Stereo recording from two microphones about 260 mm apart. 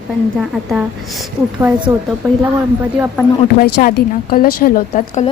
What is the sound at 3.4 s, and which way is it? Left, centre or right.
Speech, left.